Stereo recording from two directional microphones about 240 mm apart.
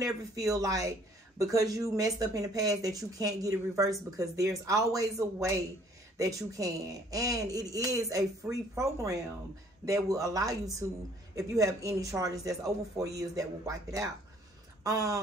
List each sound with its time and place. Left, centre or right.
0.0 s a woman's voice: centre